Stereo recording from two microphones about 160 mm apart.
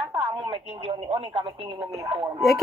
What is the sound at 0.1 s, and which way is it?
Speech, 25° right (ahead or behind).